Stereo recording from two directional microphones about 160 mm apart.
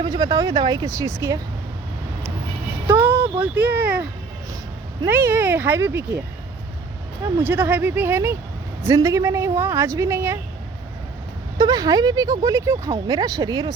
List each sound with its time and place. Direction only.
0.0 s speech: 20° right (ahead or behind)
2.8 s a woman's voice: 15° right (ahead or behind)
5.0 s a woman's voice: 15° right (ahead or behind)
7.4 s a woman's voice: 10° right (ahead or behind)
11.5 s speech: 25° right (ahead or behind)